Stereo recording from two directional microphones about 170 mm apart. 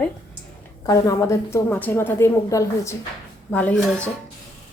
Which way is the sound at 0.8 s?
20° left (ahead or behind).